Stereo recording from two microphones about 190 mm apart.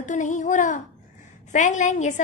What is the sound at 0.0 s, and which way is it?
A child's voice, 40° left (ahead or behind).